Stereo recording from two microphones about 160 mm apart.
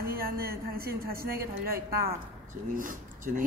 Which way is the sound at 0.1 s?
70° right (ahead or behind).